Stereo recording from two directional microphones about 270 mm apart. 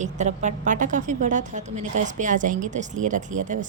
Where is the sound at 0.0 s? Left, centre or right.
Right.